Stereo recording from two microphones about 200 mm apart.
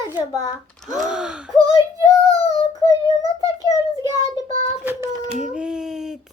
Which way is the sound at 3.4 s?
20° right (ahead or behind).